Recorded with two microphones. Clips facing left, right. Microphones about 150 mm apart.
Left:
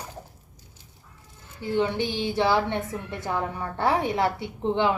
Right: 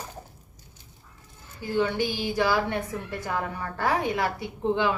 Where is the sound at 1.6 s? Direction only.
25° left (ahead or behind).